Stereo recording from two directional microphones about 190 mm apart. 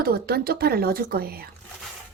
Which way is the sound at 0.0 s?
55° right (ahead or behind).